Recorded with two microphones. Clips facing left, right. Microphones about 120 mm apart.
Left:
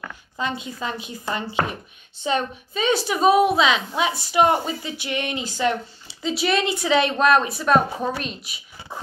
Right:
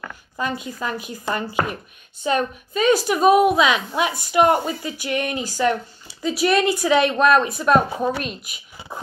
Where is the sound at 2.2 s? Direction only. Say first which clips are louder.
Right 2 dB; 50° right (ahead or behind).